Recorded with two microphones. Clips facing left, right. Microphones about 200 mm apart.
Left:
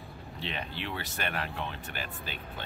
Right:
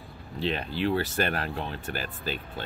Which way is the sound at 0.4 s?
35° right (ahead or behind).